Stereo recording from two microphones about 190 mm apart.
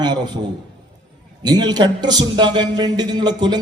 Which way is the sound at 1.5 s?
20° right (ahead or behind).